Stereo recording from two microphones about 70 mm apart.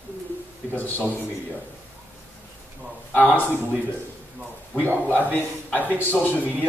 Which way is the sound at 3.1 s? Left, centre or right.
Left.